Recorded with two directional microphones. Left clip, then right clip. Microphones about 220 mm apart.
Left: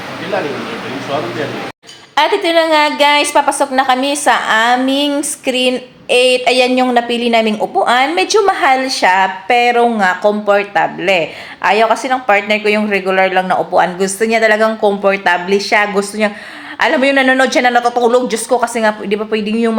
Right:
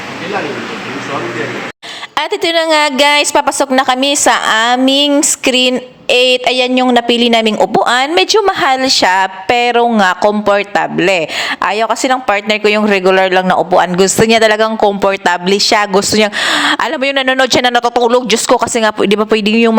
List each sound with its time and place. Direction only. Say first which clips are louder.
2.1 s a woman's voice: left 2 dB; 45° right (ahead or behind)